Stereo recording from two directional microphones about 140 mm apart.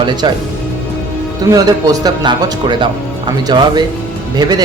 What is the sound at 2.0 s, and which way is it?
Speech, 30° right (ahead or behind).